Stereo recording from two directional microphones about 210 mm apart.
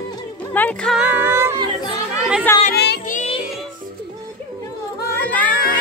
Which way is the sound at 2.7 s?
50° left (ahead or behind).